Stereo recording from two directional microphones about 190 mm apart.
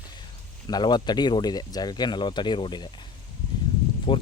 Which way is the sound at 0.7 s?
20° left (ahead or behind).